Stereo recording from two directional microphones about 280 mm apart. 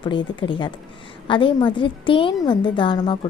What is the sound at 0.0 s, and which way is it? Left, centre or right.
A woman's voice, centre.